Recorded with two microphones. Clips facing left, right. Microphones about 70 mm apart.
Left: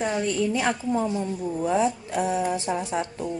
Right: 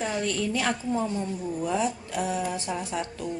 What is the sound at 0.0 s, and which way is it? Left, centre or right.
A woman's voice, centre.